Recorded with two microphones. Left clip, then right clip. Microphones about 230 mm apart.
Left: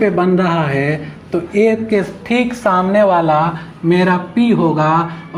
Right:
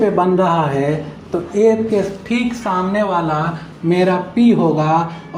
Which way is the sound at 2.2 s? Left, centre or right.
Left.